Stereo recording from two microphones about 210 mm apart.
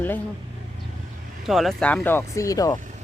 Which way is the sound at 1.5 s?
Centre (ahead or behind).